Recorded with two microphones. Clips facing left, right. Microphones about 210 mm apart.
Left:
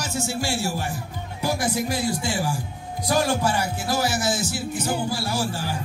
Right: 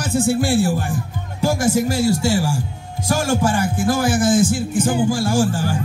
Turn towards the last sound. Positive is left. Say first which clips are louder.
# right 8 dB
turn(degrees=-50)  # may be behind; listen again after turning